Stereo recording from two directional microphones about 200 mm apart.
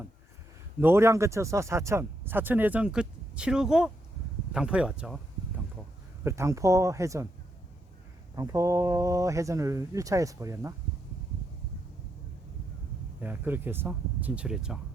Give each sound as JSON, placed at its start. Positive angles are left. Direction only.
{"t": 0.8, "sound": "speech", "side_deg": -10}
{"t": 6.2, "sound": "speech", "side_deg": -15}
{"t": 8.4, "sound": "speech", "side_deg": -15}
{"t": 13.1, "sound": "speech", "side_deg": -10}